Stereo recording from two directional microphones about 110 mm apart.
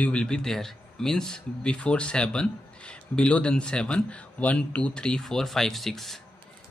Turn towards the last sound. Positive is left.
turn(degrees=0)  # may be behind; listen again after turning